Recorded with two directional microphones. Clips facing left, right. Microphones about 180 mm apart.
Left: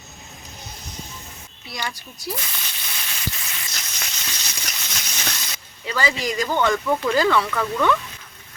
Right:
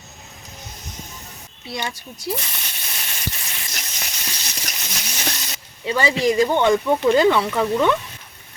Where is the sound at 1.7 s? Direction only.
25° right (ahead or behind).